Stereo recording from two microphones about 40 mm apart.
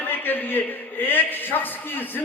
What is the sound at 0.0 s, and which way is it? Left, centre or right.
A man's voice, left.